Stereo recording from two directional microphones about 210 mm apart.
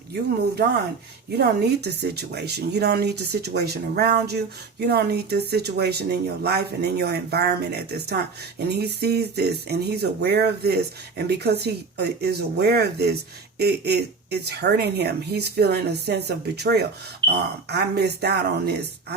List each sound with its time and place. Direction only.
1.4 s speech: 50° right (ahead or behind)